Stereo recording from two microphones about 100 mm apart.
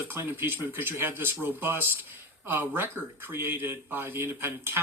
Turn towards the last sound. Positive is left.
turn(degrees=-25)  # may be behind; listen again after turning